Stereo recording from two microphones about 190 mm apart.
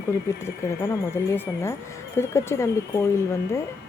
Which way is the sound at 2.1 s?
15° left (ahead or behind).